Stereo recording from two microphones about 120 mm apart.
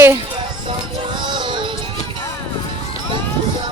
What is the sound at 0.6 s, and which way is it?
Music, 40° right (ahead or behind).